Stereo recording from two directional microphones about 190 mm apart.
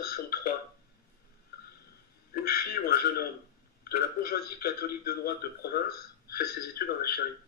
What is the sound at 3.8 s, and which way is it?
A man's voice, 50° left (ahead or behind).